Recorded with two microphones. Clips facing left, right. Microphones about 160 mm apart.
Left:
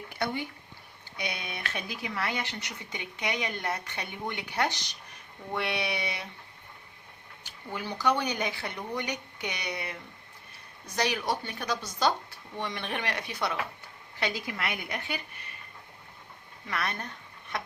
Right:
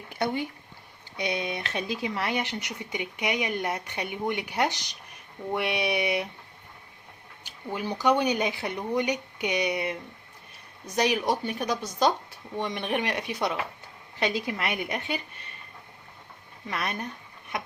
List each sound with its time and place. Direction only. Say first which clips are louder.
1.1 s speech: right 7 dB; 20° right (ahead or behind)
7.4 s speech: right 5 dB; 20° right (ahead or behind)
16.6 s speech: right 2 dB; 20° right (ahead or behind)
17.5 s a sound: right 2 dB; 15° right (ahead or behind)